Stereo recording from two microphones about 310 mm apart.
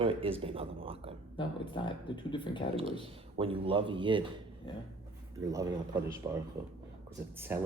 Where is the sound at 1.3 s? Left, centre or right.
Centre.